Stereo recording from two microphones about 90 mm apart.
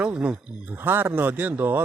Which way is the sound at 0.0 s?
15° right (ahead or behind).